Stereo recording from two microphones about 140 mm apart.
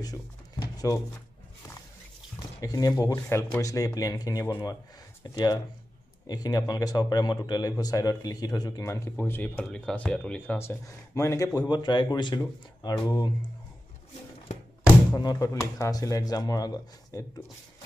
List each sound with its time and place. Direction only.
0.0 s a sound: 25° left (ahead or behind)
2.6 s speech: 25° left (ahead or behind)
12.4 s speech: 20° left (ahead or behind)
15.1 s speech: 30° left (ahead or behind)